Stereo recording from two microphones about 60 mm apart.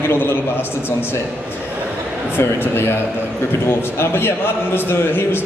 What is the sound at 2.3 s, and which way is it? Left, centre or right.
A man's voice, left.